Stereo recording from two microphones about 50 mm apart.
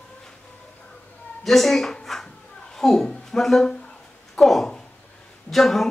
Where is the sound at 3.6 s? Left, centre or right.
Centre.